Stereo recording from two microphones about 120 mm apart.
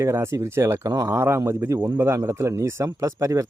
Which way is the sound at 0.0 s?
25° right (ahead or behind).